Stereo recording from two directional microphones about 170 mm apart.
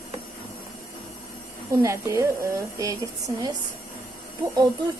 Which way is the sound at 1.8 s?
15° right (ahead or behind).